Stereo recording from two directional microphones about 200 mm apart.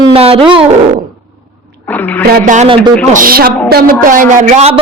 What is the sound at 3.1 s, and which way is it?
A woman's voice, 45° right (ahead or behind).